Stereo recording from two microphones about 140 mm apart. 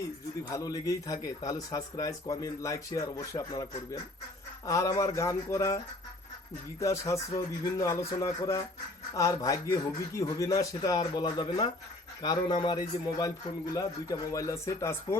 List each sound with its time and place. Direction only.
0.5 s a man's voice: 25° left (ahead or behind)